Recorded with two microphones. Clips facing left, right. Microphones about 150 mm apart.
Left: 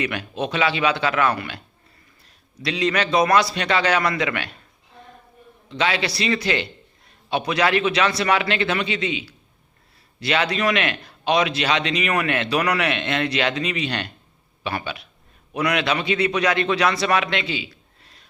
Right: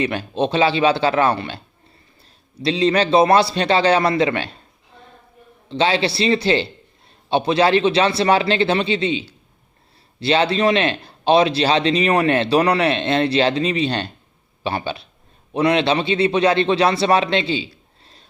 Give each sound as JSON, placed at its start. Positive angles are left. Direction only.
{"t": 0.0, "sound": "a man's voice", "side_deg": -30}
{"t": 5.6, "sound": "a man's voice", "side_deg": -30}